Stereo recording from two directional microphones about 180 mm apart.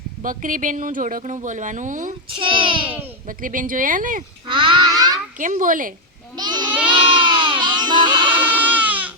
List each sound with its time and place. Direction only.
0.2 s speech: 45° right (ahead or behind)
2.4 s a child's voice: 30° right (ahead or behind)
3.2 s speech: 50° right (ahead or behind)
4.4 s babbling: 30° right (ahead or behind)
5.4 s speech: 45° right (ahead or behind)
6.3 s goat: 25° right (ahead or behind)
6.9 s a sound: 25° right (ahead or behind)
8.5 s goat: 10° right (ahead or behind)